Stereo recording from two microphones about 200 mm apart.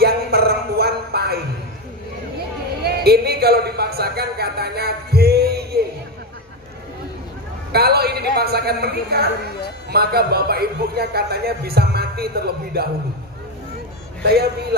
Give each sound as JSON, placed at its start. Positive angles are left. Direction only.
{"t": 0.0, "sound": "music", "side_deg": -50}
{"t": 2.8, "sound": "a sound", "side_deg": -50}
{"t": 7.7, "sound": "a woman's voice", "side_deg": -50}
{"t": 14.2, "sound": "a man's voice", "side_deg": -55}